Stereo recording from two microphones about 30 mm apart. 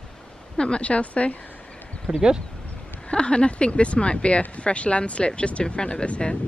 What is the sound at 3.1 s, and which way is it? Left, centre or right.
Speech, left.